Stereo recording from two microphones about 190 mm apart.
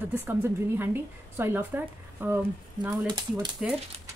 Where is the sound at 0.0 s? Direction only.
10° right (ahead or behind).